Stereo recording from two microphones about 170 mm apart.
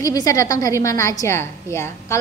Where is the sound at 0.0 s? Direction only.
20° left (ahead or behind).